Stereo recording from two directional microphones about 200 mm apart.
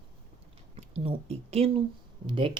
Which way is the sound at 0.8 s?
30° right (ahead or behind).